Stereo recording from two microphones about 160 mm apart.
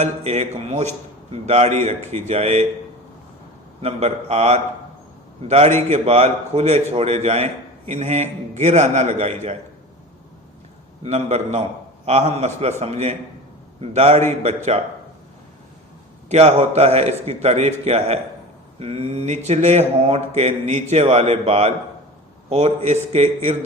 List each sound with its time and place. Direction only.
0.0 s a man's voice: 40° right (ahead or behind)
3.8 s a man's voice: 40° right (ahead or behind)
11.0 s a man's voice: 40° right (ahead or behind)
16.3 s a man's voice: 40° right (ahead or behind)